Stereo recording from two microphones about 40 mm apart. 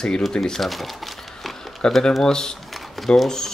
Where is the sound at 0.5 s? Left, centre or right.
Centre.